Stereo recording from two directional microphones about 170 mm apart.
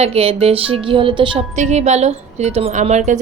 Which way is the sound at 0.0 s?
35° right (ahead or behind).